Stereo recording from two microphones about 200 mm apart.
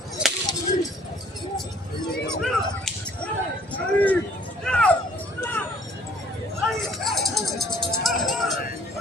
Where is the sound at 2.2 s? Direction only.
Centre (ahead or behind).